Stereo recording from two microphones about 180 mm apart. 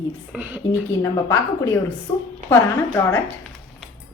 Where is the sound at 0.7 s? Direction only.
15° left (ahead or behind).